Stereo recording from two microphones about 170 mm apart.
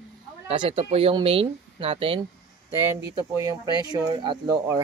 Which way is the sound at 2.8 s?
15° right (ahead or behind).